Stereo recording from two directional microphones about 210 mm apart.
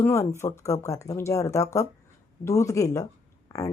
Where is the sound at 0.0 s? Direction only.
15° left (ahead or behind).